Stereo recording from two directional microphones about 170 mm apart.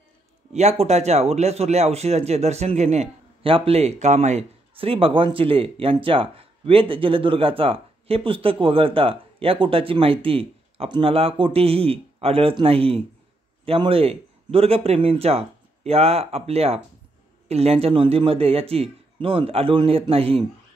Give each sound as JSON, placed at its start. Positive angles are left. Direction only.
{"t": 0.5, "sound": "speech", "side_deg": -40}